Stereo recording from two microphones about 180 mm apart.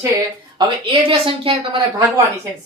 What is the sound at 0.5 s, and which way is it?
A woman's voice, 30° right (ahead or behind).